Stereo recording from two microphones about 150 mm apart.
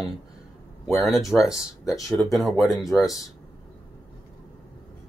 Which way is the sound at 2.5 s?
20° left (ahead or behind).